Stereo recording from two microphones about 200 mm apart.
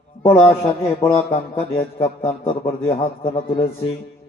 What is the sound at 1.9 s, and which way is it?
Speech, 25° left (ahead or behind).